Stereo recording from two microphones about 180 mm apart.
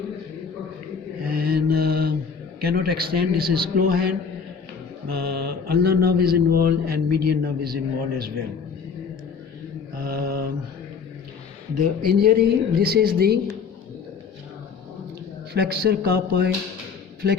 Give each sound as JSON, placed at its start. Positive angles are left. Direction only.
{"t": 1.2, "sound": "mantra", "side_deg": -55}
{"t": 2.6, "sound": "speech", "side_deg": -55}
{"t": 5.4, "sound": "speech", "side_deg": -60}
{"t": 9.9, "sound": "mantra", "side_deg": -55}
{"t": 11.7, "sound": "speech", "side_deg": -50}
{"t": 15.5, "sound": "speech", "side_deg": -60}